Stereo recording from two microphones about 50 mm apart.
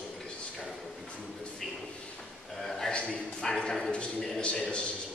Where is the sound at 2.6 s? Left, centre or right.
Centre.